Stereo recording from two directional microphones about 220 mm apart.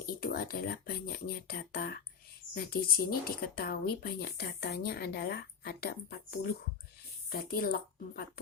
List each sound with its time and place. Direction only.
0.0 s a woman's voice: 40° left (ahead or behind)